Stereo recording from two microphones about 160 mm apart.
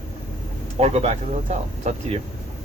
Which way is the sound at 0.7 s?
40° right (ahead or behind).